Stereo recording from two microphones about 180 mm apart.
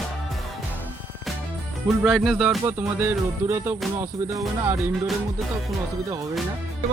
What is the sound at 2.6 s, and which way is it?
Music, 10° right (ahead or behind).